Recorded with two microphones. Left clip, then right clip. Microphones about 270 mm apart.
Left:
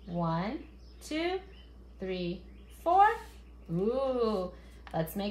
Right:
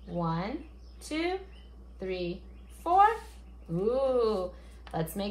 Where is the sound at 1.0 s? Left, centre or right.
Centre.